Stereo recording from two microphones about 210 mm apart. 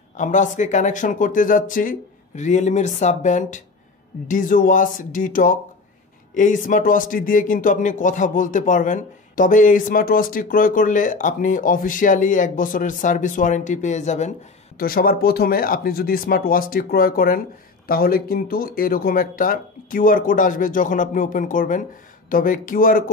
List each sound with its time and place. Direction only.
0.2 s speech: 35° left (ahead or behind)
14.8 s speech: 45° left (ahead or behind)